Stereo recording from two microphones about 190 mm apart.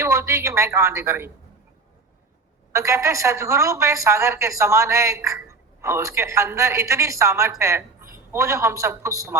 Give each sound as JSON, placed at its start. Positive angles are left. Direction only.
{"t": 0.0, "sound": "a woman's voice", "side_deg": -15}
{"t": 2.7, "sound": "a woman's voice", "side_deg": -15}